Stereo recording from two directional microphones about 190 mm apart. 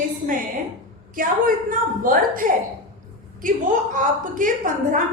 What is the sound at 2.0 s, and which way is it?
Speech, 45° right (ahead or behind).